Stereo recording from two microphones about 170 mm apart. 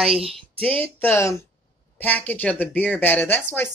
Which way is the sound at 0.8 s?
10° left (ahead or behind).